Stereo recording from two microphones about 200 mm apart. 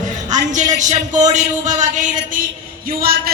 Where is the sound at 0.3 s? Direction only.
40° right (ahead or behind).